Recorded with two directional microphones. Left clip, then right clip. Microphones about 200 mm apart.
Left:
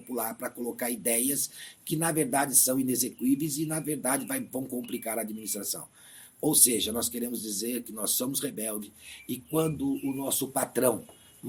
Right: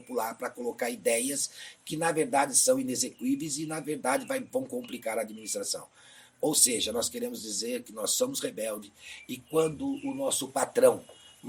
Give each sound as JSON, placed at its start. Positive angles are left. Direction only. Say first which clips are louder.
{"t": 0.1, "sound": "speech", "louder": "right 2 dB", "side_deg": 25}